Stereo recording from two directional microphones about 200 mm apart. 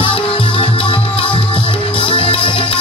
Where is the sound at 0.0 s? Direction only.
25° left (ahead or behind).